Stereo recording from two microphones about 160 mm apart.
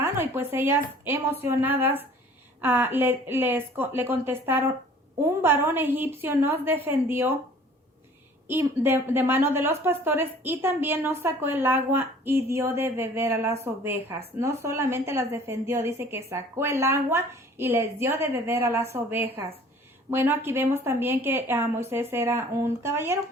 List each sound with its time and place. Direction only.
0.0 s a woman's voice: 15° right (ahead or behind)
8.4 s a woman's voice: 15° right (ahead or behind)